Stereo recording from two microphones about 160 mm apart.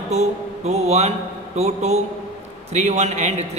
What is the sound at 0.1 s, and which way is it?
A man's voice, 45° right (ahead or behind).